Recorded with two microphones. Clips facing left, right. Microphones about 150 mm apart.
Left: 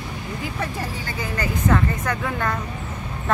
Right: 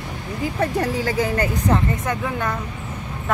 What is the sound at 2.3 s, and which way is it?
Speech, 10° right (ahead or behind).